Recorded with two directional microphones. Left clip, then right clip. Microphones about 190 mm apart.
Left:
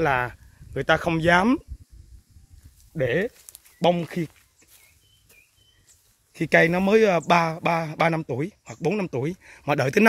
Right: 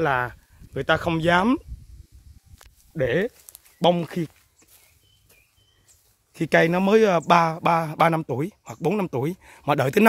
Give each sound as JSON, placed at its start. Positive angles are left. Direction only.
{"t": 0.0, "sound": "speech", "side_deg": 0}
{"t": 3.0, "sound": "a man's voice", "side_deg": -25}
{"t": 3.3, "sound": "a sound", "side_deg": -5}
{"t": 3.8, "sound": "a man's voice", "side_deg": -25}
{"t": 6.3, "sound": "a man's voice", "side_deg": -15}